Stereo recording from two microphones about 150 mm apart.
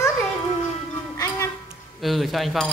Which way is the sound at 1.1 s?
20° left (ahead or behind).